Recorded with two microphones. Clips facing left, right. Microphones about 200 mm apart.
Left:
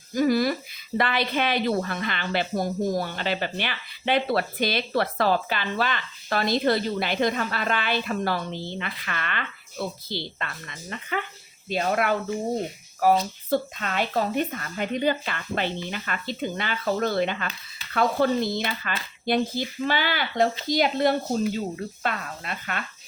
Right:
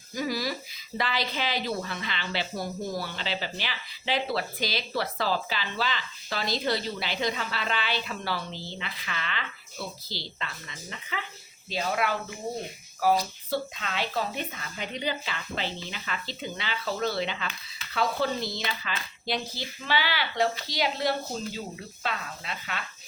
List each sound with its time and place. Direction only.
0.1 s a woman's voice: 50° left (ahead or behind)
13.5 s speech: 50° left (ahead or behind)